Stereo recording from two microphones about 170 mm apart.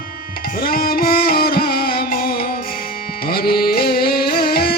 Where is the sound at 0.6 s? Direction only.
60° left (ahead or behind).